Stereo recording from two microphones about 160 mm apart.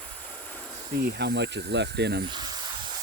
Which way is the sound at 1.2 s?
90° right.